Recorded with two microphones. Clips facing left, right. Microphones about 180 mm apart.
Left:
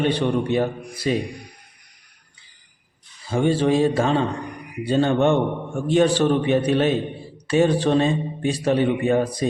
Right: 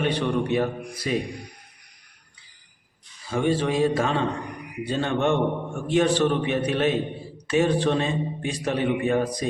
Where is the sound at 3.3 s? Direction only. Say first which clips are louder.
Left 4 dB; 30° left (ahead or behind).